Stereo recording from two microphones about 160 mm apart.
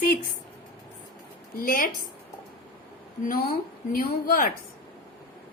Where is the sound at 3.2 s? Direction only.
65° left (ahead or behind).